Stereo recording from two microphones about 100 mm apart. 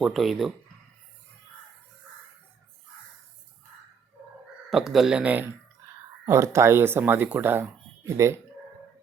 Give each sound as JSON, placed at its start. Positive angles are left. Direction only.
{"t": 0.0, "sound": "speech", "side_deg": 0}
{"t": 4.7, "sound": "speech", "side_deg": -5}
{"t": 6.2, "sound": "speech", "side_deg": -30}